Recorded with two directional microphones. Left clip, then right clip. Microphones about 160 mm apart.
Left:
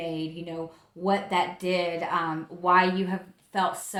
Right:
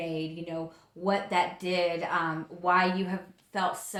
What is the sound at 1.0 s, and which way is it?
A woman's voice, 35° left (ahead or behind).